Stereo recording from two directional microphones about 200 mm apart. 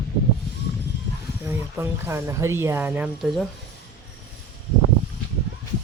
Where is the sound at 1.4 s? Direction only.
10° right (ahead or behind).